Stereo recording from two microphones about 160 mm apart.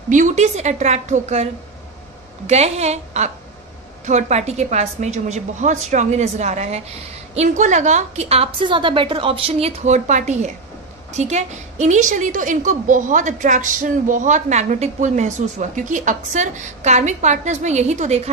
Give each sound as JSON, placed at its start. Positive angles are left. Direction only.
{"t": 0.1, "sound": "a woman's voice", "side_deg": -50}